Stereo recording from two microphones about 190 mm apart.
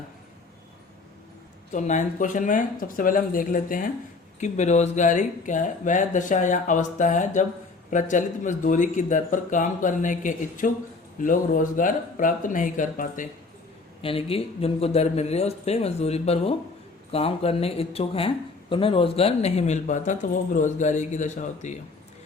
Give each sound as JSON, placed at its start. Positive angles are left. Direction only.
{"t": 1.7, "sound": "speech", "side_deg": 40}
{"t": 14.0, "sound": "speech", "side_deg": 30}